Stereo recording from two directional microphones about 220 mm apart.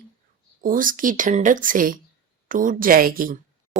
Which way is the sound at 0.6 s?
40° right (ahead or behind).